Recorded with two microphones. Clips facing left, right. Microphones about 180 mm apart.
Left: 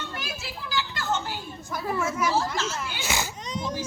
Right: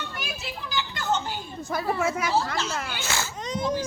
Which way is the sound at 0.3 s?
20° right (ahead or behind).